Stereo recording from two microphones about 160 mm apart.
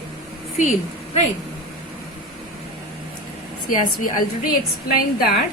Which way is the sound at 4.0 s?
60° left (ahead or behind).